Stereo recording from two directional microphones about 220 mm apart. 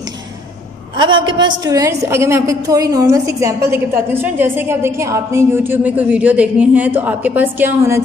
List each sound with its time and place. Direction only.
0.9 s a woman's voice: 20° right (ahead or behind)